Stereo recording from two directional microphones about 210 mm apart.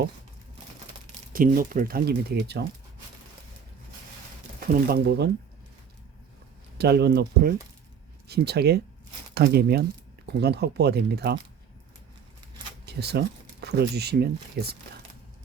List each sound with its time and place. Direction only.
1.3 s speech: 40° right (ahead or behind)
4.7 s speech: 50° right (ahead or behind)
6.7 s speech: 50° right (ahead or behind)
12.8 s speech: 50° right (ahead or behind)